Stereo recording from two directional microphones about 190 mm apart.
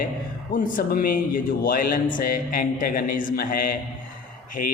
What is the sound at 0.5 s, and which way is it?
A man's voice, 50° left (ahead or behind).